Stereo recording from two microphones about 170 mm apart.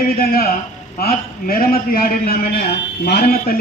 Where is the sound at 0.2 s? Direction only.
60° left (ahead or behind).